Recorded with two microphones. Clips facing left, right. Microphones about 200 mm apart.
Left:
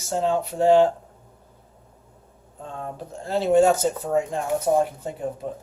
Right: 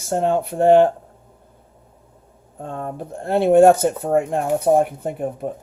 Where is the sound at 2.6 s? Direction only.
55° right (ahead or behind).